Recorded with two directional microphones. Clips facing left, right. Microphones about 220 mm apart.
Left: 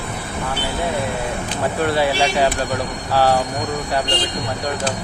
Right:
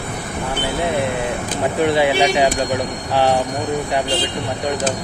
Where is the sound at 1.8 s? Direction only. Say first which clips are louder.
Right 3 dB; 15° right (ahead or behind).